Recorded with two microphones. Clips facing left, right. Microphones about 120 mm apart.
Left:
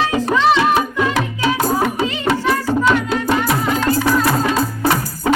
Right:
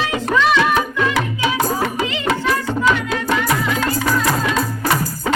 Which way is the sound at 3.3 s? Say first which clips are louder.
Left 2 dB; 40° left (ahead or behind).